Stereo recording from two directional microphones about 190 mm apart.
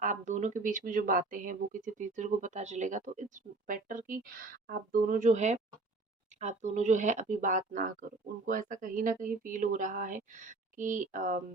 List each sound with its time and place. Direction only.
0.0 s speech: 40° right (ahead or behind)